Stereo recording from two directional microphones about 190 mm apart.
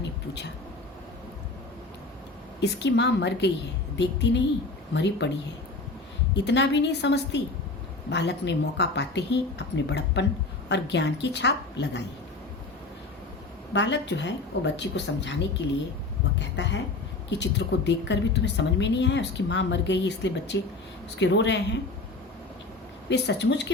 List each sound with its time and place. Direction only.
2.6 s a woman's voice: 65° left (ahead or behind)
6.3 s speech: 65° left (ahead or behind)
13.7 s a woman's voice: 70° left (ahead or behind)
16.6 s a woman's voice: 70° left (ahead or behind)
23.0 s speech: 65° left (ahead or behind)